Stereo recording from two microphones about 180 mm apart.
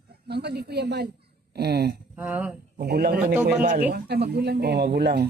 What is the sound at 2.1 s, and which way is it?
Speech, 10° right (ahead or behind).